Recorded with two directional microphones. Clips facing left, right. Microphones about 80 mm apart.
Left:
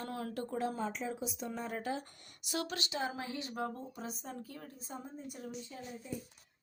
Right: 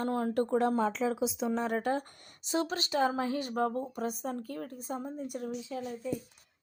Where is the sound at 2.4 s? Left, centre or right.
Right.